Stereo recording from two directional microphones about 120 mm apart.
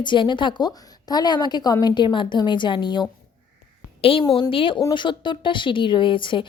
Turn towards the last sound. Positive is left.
turn(degrees=45)  # may be behind; listen again after turning